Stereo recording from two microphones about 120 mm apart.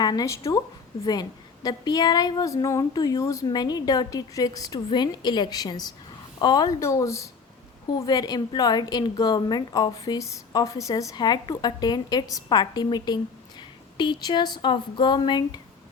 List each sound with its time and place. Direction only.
0.0 s a woman's voice: 35° left (ahead or behind)